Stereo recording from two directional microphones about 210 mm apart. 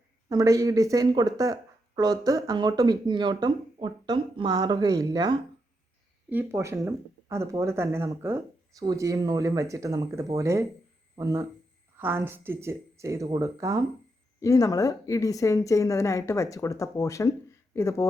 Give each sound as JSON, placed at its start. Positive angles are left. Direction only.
{"t": 0.3, "sound": "speech", "side_deg": -15}
{"t": 14.4, "sound": "a woman's voice", "side_deg": 15}